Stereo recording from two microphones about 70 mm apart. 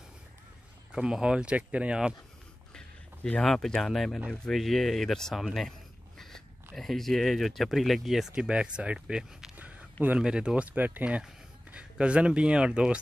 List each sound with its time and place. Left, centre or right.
0.9 s speech: centre
3.4 s speech: centre
8.5 s speech: centre
9.6 s speech: right